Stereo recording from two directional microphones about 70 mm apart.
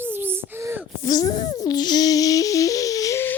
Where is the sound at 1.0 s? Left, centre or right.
Left.